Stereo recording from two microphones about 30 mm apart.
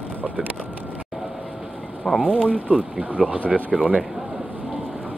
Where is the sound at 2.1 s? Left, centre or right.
Centre.